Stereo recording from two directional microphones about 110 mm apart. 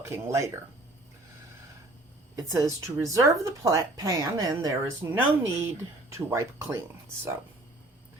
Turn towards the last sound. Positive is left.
turn(degrees=-25)  # may be behind; listen again after turning